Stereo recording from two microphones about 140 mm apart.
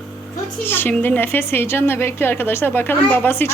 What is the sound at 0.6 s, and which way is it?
A woman's voice, 15° left (ahead or behind).